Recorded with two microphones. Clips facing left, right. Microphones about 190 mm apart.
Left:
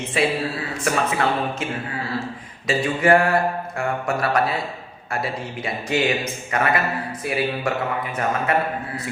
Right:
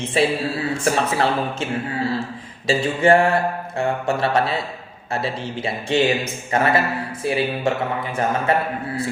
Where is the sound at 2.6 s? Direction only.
30° right (ahead or behind).